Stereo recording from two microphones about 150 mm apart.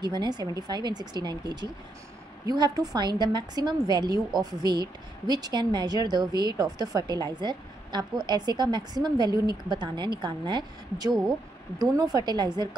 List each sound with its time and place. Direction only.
0.0 s speech: 30° right (ahead or behind)